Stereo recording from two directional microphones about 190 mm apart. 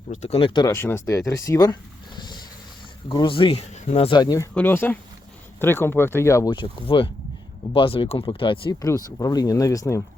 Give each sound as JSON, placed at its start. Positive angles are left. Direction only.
{"t": 0.1, "sound": "speech", "side_deg": 35}
{"t": 2.1, "sound": "a sound", "side_deg": 25}
{"t": 3.1, "sound": "speech", "side_deg": 25}